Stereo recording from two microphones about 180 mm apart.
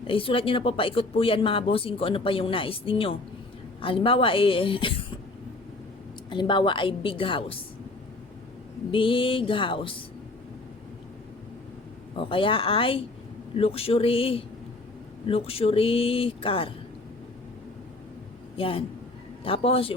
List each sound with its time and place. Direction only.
0.1 s a woman's voice: 30° left (ahead or behind)
6.3 s a woman's voice: 25° left (ahead or behind)
8.9 s a woman's voice: 30° left (ahead or behind)
12.1 s a woman's voice: 30° left (ahead or behind)
18.5 s a man's voice: 30° left (ahead or behind)